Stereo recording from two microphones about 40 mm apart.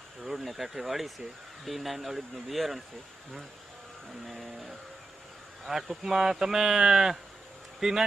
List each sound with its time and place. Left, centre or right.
0.2 s speech: centre
4.3 s speech: centre